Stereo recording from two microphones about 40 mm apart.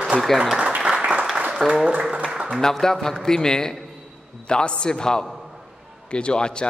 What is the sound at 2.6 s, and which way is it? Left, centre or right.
A man's voice, centre.